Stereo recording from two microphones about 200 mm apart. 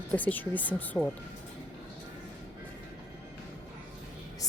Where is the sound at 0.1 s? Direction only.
10° left (ahead or behind).